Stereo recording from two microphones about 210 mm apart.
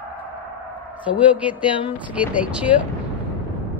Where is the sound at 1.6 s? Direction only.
25° left (ahead or behind).